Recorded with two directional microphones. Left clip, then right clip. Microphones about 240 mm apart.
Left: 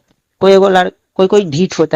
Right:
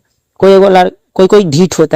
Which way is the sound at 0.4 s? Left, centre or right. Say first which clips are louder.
Right 3 dB; right.